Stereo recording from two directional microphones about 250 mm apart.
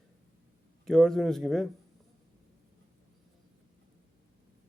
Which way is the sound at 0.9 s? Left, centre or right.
Centre.